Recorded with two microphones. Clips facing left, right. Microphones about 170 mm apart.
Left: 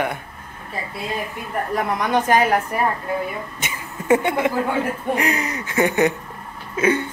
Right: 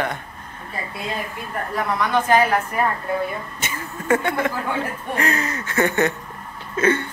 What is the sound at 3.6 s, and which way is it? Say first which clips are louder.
A woman's voice: right 1 dB; 15° left (ahead or behind).